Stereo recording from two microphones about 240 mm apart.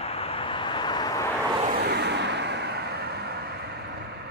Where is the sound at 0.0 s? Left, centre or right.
Left.